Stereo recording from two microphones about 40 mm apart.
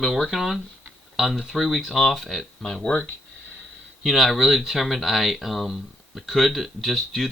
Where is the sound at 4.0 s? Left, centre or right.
Centre.